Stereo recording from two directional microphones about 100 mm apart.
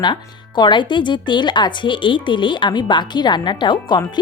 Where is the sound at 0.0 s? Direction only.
50° left (ahead or behind).